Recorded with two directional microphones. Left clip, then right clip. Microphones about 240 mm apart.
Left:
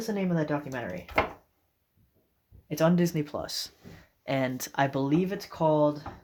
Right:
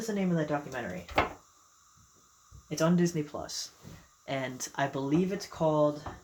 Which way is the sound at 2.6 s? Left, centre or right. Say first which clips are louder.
Left 3 dB; left.